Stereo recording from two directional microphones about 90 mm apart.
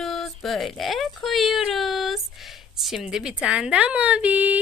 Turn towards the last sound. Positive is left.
turn(degrees=-15)  # may be behind; listen again after turning